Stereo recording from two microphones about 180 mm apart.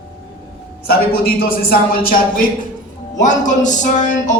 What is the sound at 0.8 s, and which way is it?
A woman's voice, 55° left (ahead or behind).